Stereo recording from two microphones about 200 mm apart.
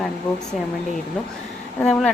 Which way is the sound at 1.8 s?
5° left (ahead or behind).